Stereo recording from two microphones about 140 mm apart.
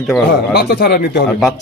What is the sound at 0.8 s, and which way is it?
Speech, 90° left.